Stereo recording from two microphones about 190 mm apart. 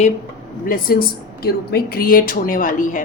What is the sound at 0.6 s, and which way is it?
Speech, 50° left (ahead or behind).